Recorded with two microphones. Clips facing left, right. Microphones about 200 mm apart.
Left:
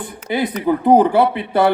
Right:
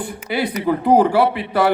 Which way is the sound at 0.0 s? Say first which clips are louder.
Left 1 dB; 20° left (ahead or behind).